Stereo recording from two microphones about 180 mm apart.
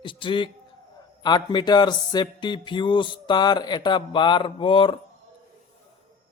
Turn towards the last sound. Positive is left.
turn(degrees=30)  # may be behind; listen again after turning